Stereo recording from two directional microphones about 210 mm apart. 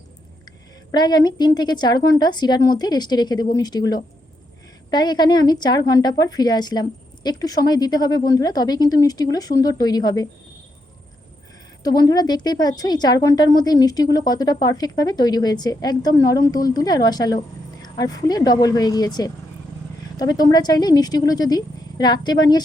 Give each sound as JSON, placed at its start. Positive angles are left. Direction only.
{"t": 0.9, "sound": "a woman's voice", "side_deg": 20}
{"t": 11.8, "sound": "a woman's voice", "side_deg": 20}